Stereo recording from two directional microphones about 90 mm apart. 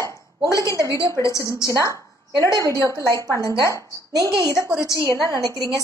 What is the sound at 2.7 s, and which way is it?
Speech, 30° left (ahead or behind).